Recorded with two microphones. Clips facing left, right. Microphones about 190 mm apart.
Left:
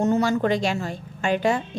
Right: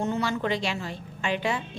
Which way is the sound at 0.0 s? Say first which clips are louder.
Left 7 dB; 45° left (ahead or behind).